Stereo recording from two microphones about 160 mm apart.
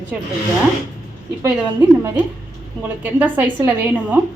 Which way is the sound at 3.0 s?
10° right (ahead or behind).